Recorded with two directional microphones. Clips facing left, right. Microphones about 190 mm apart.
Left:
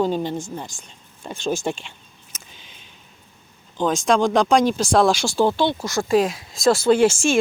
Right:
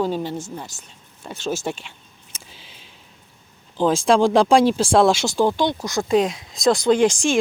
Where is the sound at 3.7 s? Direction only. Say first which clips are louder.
Right 2 dB; 30° right (ahead or behind).